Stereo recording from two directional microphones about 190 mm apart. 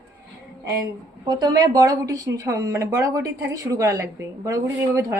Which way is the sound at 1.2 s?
20° right (ahead or behind).